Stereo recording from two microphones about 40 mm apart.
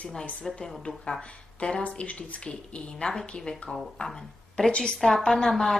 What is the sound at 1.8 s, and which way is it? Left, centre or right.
Speech, left.